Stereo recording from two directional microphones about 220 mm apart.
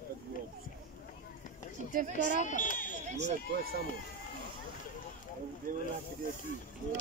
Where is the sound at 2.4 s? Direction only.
35° left (ahead or behind).